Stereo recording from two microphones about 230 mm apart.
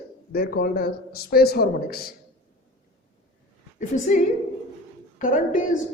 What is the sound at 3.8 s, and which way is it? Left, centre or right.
A man's voice, left.